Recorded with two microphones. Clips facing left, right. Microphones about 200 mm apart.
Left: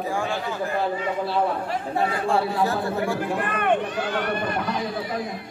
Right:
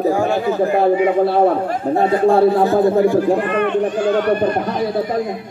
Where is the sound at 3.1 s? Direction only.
40° right (ahead or behind).